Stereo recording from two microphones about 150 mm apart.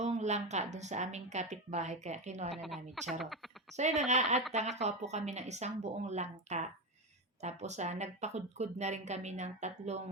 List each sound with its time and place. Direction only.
0.0 s speech: 50° right (ahead or behind)
2.5 s speech: centre (ahead or behind)
3.8 s speech: 50° right (ahead or behind)